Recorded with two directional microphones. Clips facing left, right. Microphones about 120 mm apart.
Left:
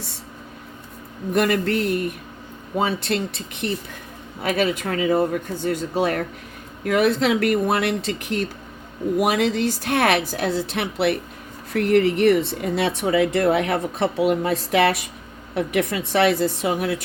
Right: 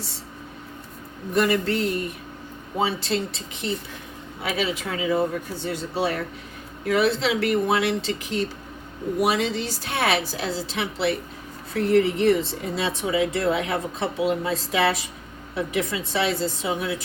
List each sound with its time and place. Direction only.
1.3 s speech: 55° left (ahead or behind)
2.8 s a woman's voice: 55° left (ahead or behind)